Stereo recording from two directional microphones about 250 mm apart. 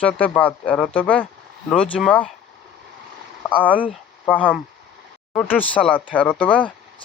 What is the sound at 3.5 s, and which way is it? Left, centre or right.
Speech, centre.